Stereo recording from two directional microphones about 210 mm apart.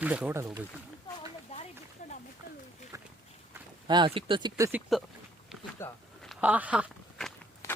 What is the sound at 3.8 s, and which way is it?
Speech, 20° right (ahead or behind).